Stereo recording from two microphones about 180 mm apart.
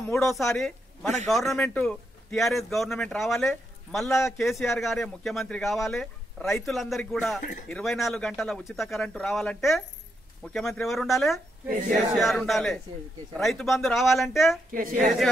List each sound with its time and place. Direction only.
1.2 s speech: centre (ahead or behind)
14.7 s a woman's voice: 50° right (ahead or behind)